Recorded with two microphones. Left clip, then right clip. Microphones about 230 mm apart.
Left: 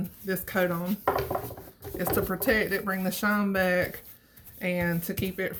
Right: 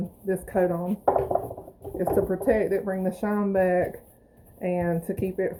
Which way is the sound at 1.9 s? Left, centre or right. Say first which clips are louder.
Right 4 dB; left.